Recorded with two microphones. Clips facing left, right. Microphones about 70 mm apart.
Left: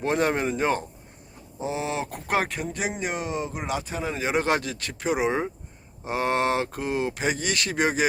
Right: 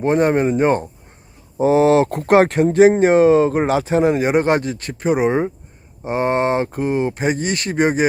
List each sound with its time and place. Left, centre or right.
0.0 s speech: right
1.5 s speech: right
3.0 s speech: right
4.1 s speech: right